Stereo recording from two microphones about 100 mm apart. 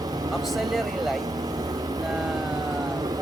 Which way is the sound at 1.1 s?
40° right (ahead or behind).